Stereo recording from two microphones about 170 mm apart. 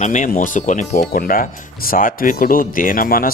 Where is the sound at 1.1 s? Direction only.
55° left (ahead or behind).